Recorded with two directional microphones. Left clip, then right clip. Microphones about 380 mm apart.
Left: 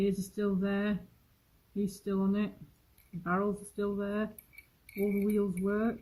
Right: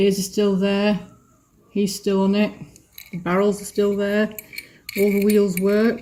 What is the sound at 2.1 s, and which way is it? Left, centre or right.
Speech, right.